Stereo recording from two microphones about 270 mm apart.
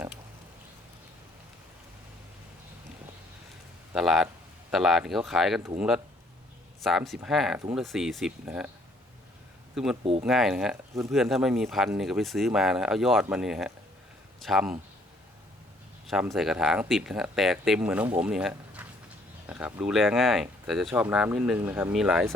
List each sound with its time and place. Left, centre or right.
3.9 s speech: centre
9.7 s speech: centre
10.0 s speech: right
10.2 s speech: centre
16.0 s speech: centre